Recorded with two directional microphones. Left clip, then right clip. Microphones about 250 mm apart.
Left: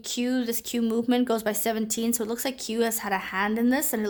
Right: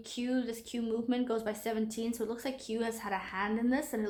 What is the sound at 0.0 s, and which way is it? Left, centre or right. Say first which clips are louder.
Speech: left 7 dB; left.